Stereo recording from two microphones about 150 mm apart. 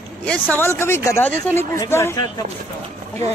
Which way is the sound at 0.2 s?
10° left (ahead or behind).